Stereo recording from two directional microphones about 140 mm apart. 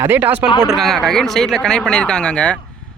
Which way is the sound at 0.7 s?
Centre (ahead or behind).